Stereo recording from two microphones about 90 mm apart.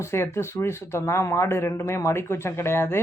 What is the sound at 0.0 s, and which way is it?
Speech, 30° left (ahead or behind).